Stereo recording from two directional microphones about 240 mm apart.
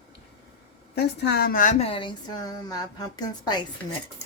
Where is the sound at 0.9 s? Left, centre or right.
Left; by 3.6 s centre.